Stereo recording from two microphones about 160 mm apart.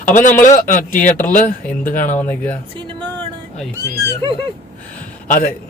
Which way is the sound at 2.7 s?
30° right (ahead or behind).